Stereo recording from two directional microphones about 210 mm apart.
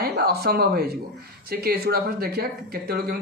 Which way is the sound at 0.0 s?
45° right (ahead or behind).